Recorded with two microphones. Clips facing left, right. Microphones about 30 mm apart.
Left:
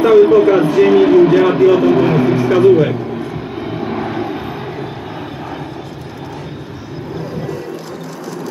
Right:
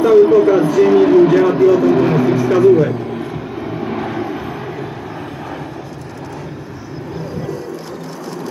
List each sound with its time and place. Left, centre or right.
0.0 s a sound: left
1.4 s vehicle: left
2.0 s vehicle: centre
2.3 s music: left
3.9 s vehicle: centre
4.2 s vehicle: centre